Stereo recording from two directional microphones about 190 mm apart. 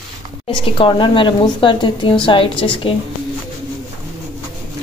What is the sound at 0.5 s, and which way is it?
Speech, 25° left (ahead or behind).